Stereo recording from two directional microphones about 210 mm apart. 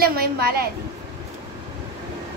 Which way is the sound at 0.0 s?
45° right (ahead or behind).